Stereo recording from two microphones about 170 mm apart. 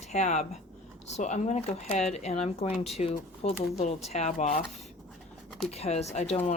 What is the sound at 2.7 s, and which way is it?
Speech, centre (ahead or behind).